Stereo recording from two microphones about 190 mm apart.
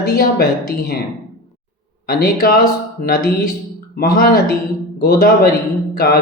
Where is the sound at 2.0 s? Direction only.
50° left (ahead or behind).